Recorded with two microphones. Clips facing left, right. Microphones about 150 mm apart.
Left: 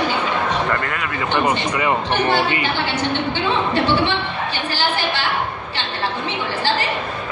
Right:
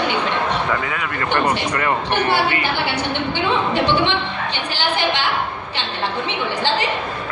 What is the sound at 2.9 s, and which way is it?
A woman's voice, 15° right (ahead or behind).